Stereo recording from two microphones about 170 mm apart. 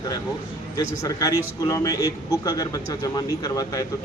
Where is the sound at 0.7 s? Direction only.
20° left (ahead or behind).